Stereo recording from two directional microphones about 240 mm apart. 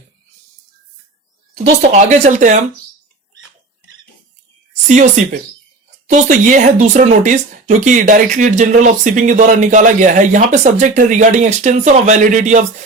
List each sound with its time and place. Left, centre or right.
1.9 s speech: right
4.7 s speech: right